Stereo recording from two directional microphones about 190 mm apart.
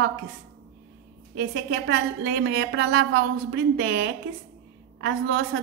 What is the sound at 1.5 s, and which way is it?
A woman's voice, 65° right (ahead or behind).